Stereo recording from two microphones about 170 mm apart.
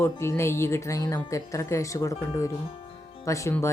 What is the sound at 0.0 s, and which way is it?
Speech, 15° left (ahead or behind).